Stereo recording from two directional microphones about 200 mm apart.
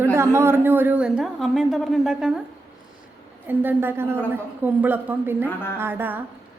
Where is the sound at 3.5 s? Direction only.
10° right (ahead or behind).